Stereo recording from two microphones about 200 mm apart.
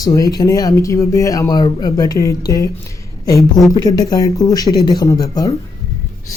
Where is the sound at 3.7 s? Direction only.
15° left (ahead or behind).